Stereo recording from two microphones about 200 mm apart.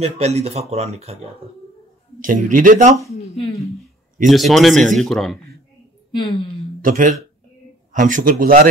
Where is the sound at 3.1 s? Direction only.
30° left (ahead or behind).